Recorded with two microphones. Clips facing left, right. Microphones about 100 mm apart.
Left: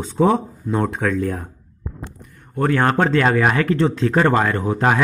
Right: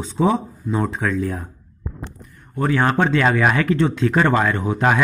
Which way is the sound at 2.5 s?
55° left (ahead or behind).